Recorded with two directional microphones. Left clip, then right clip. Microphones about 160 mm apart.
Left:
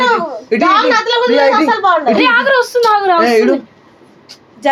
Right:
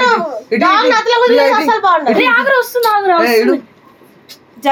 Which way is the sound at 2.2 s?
20° right (ahead or behind).